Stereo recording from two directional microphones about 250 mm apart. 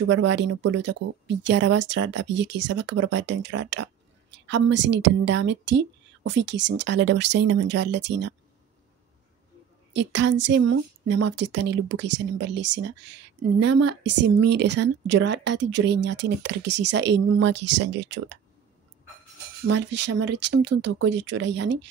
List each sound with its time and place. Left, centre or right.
0.1 s speech: right
9.9 s speech: right
19.7 s speech: right